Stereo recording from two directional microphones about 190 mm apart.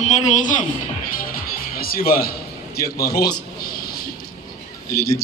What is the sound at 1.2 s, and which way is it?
Music, 50° left (ahead or behind).